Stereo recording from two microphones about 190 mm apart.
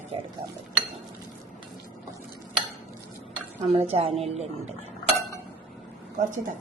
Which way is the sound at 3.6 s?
30° right (ahead or behind).